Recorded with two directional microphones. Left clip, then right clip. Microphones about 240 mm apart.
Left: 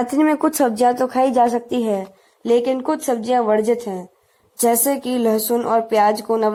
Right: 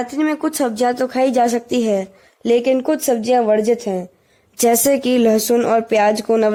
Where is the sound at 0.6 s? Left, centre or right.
Centre.